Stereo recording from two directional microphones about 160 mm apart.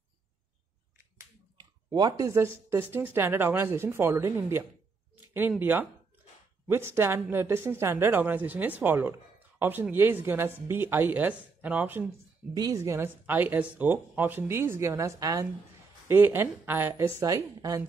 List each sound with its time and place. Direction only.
1.9 s speech: 25° right (ahead or behind)
12.5 s speech: 20° right (ahead or behind)